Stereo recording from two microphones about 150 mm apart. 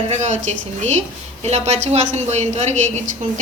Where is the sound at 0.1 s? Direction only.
50° right (ahead or behind).